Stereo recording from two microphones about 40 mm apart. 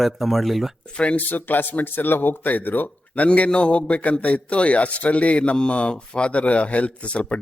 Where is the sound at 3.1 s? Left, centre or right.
Left.